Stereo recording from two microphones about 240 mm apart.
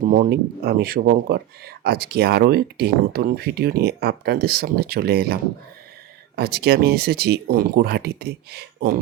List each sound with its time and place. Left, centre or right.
0.0 s speech: right